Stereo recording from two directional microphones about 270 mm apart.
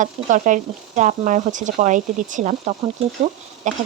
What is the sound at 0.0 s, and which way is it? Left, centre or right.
Speech, right.